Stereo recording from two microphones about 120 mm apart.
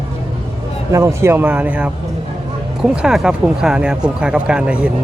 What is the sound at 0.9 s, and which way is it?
Speech, 20° right (ahead or behind).